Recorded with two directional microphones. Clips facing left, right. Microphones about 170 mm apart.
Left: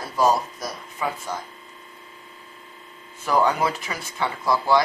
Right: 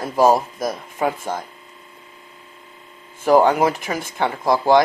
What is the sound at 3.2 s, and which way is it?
Speech, 50° right (ahead or behind).